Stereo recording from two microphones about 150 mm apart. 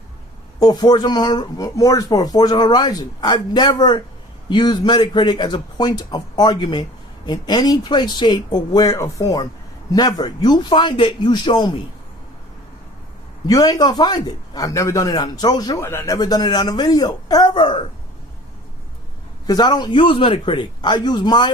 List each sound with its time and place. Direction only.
0.6 s a man's voice: 30° left (ahead or behind)
13.5 s a man's voice: 25° left (ahead or behind)
19.5 s a man's voice: 25° left (ahead or behind)